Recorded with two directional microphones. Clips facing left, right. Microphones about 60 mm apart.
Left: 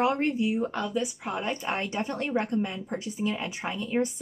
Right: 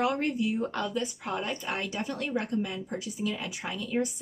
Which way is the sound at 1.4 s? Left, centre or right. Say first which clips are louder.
Left 3 dB; left.